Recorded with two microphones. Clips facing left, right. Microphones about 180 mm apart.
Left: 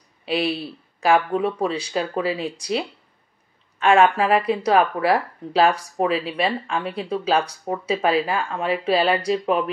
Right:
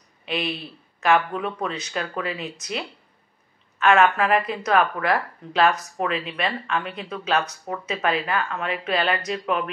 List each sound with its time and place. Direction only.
0.2 s speech: 35° left (ahead or behind)
3.7 s speech: 30° left (ahead or behind)